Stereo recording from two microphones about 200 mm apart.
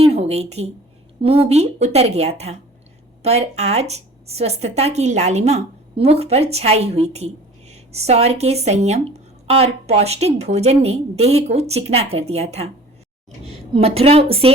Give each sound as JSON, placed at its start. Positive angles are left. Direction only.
{"t": 0.0, "sound": "a woman's voice", "side_deg": -30}